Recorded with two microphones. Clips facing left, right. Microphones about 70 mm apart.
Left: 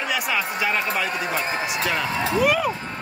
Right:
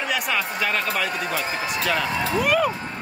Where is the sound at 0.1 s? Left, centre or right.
Centre.